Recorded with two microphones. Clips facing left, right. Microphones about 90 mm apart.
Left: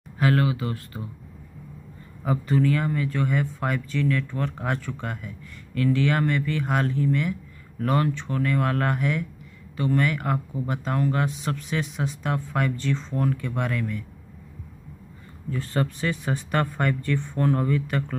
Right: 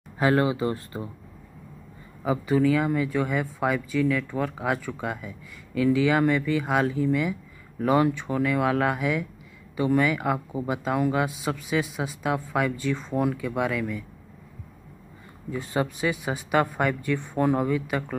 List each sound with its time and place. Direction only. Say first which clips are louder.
0.2 s speech: right 1 dB; 25° right (ahead or behind)
2.2 s speech: right 1 dB; 10° right (ahead or behind)
15.5 s speech: even; 15° right (ahead or behind)